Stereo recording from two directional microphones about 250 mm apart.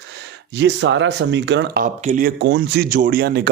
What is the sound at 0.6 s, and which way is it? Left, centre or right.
Speech, right.